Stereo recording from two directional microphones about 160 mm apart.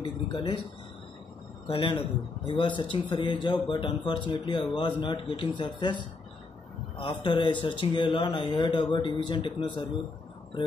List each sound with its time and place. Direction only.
0.0 s speech: 30° left (ahead or behind)
1.7 s speech: 30° left (ahead or behind)